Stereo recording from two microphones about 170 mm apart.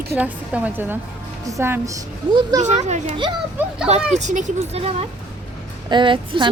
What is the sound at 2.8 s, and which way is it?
A child's voice, 40° right (ahead or behind).